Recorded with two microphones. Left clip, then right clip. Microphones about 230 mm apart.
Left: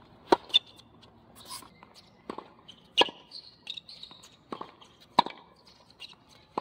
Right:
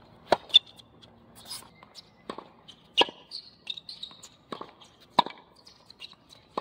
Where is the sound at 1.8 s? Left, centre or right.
Right.